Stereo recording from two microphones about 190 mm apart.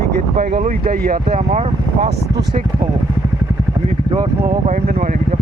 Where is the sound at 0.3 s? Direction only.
40° right (ahead or behind).